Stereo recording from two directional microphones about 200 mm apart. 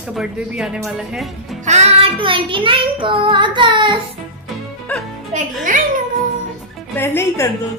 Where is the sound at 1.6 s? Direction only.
35° right (ahead or behind).